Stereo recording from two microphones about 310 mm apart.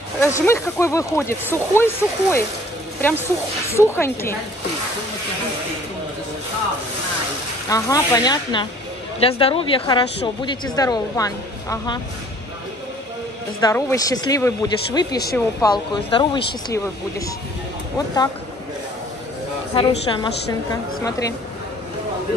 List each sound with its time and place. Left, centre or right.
0.2 s a woman's voice: centre
3.6 s a woman's voice: centre
7.7 s a woman's voice: centre
13.6 s a woman's voice: centre
17.9 s a woman's voice: centre
19.7 s a woman's voice: centre